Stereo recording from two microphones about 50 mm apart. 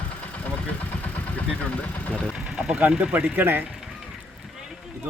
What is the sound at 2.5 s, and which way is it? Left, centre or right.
Vehicle, centre.